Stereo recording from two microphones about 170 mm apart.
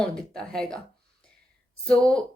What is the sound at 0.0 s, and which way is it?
Speech, 5° left (ahead or behind).